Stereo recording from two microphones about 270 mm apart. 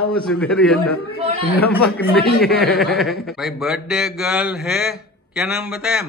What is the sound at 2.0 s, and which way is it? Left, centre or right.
Speech, left.